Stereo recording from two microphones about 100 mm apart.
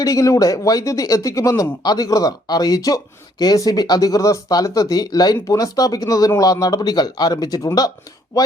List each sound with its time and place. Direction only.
0.0 s speech: 35° left (ahead or behind)